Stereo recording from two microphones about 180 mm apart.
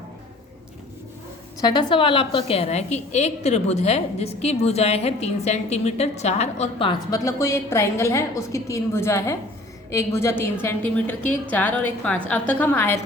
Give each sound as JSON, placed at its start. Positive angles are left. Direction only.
{"t": 1.6, "sound": "a woman's voice", "side_deg": 25}